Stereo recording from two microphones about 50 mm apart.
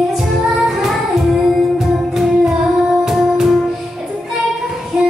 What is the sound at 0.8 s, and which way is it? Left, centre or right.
Child singing, centre.